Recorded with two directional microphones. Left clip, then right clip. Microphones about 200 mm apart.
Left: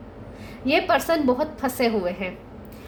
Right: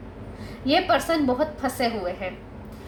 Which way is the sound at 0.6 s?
45° left (ahead or behind).